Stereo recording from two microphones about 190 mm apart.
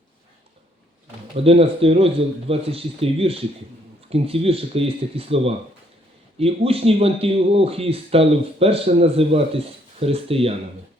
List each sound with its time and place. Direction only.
1.5 s speech: 30° right (ahead or behind)